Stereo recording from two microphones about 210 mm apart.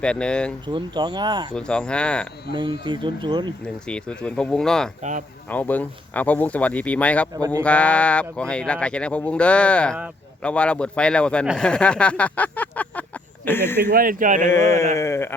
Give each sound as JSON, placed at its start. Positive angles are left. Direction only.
{"t": 0.0, "sound": "speech", "side_deg": 5}
{"t": 0.7, "sound": "speech", "side_deg": -20}
{"t": 1.5, "sound": "speech", "side_deg": 5}
{"t": 2.5, "sound": "speech", "side_deg": -20}
{"t": 3.8, "sound": "speech", "side_deg": 5}
{"t": 7.3, "sound": "speech", "side_deg": -15}
{"t": 7.6, "sound": "speech", "side_deg": 5}
{"t": 13.7, "sound": "speech", "side_deg": -45}
{"t": 14.5, "sound": "speech", "side_deg": 15}